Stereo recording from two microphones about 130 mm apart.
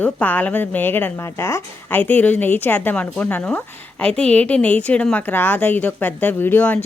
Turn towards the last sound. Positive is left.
turn(degrees=10)  # may be behind; listen again after turning